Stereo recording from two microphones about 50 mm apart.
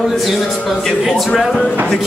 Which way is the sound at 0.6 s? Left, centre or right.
Centre.